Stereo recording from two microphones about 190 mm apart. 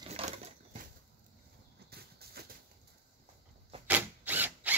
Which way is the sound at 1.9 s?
55° right (ahead or behind).